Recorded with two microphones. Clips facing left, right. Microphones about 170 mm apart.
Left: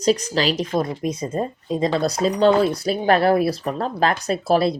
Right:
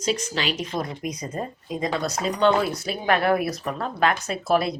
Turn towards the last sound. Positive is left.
turn(degrees=35)  # may be behind; listen again after turning